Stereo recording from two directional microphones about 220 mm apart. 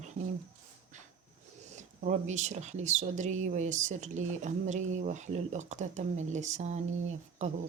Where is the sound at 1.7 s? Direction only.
30° right (ahead or behind).